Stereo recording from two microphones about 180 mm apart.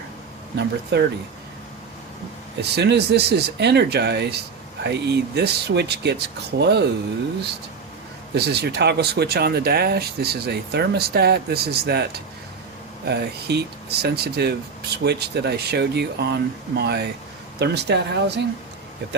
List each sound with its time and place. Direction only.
0.5 s speech: 70° right (ahead or behind)
2.6 s speech: 70° right (ahead or behind)
8.4 s speech: 65° right (ahead or behind)